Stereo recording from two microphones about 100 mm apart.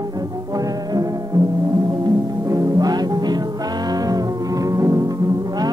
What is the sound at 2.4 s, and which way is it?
Music, 35° right (ahead or behind).